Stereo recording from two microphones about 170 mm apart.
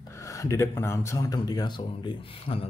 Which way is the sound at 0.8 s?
15° left (ahead or behind).